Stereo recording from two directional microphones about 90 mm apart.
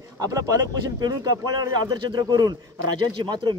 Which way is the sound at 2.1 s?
50° right (ahead or behind).